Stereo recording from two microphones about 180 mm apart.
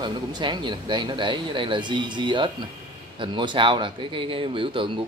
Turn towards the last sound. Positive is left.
turn(degrees=-30)  # may be behind; listen again after turning